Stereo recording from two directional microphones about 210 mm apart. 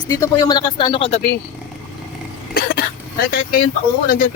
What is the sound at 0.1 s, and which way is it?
Speech, 20° left (ahead or behind).